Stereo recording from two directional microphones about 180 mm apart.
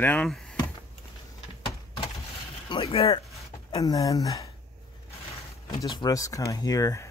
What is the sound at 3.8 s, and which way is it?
Speech, 20° left (ahead or behind).